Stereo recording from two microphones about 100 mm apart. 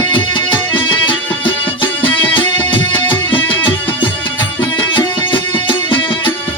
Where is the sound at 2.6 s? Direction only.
55° left (ahead or behind).